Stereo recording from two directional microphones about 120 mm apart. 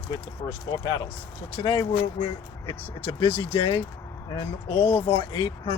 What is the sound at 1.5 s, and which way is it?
Speech, 45° left (ahead or behind).